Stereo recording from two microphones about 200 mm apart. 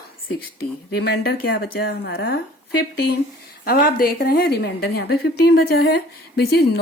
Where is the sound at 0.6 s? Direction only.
55° left (ahead or behind).